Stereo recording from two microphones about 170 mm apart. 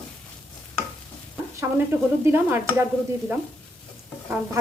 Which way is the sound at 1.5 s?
15° right (ahead or behind).